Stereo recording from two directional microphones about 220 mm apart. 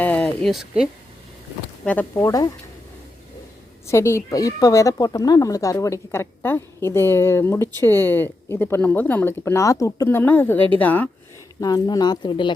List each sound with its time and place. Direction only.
0.0 s a sound: 5° left (ahead or behind)
1.8 s speech: 5° left (ahead or behind)
3.8 s speech: 10° left (ahead or behind)